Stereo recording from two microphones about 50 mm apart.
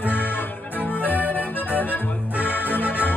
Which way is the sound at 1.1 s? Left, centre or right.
Right.